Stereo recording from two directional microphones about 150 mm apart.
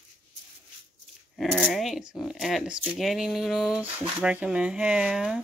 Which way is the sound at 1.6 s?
Centre (ahead or behind).